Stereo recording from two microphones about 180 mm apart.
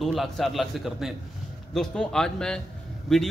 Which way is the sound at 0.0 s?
Centre (ahead or behind).